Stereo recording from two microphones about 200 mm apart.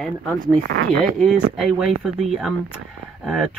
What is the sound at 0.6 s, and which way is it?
Speech, 70° right (ahead or behind).